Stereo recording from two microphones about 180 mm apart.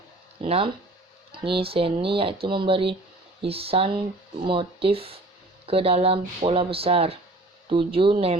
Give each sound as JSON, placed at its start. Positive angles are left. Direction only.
{"t": 0.4, "sound": "speech", "side_deg": -35}